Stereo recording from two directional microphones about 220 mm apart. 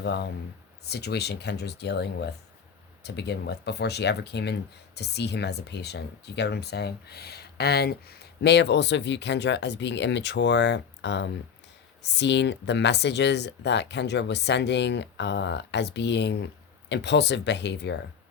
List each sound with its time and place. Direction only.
0.0 s speech: 50° left (ahead or behind)